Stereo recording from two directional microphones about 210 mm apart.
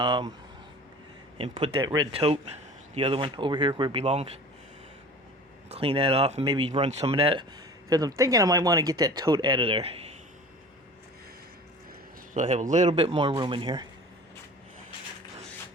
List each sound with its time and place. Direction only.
0.0 s speech: 20° right (ahead or behind)
1.4 s speech: 25° right (ahead or behind)
5.6 s speech: 30° right (ahead or behind)
7.9 s speech: 15° right (ahead or behind)
12.3 s speech: 35° right (ahead or behind)